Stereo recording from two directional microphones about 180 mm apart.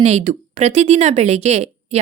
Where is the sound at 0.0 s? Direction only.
35° right (ahead or behind).